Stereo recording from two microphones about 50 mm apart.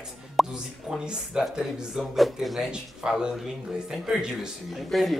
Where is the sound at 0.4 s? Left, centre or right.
Centre.